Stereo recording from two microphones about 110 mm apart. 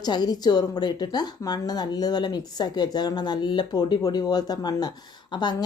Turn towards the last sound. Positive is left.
turn(degrees=40)  # may be behind; listen again after turning